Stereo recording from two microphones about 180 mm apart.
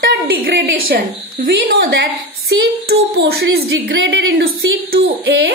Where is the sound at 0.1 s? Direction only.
60° right (ahead or behind).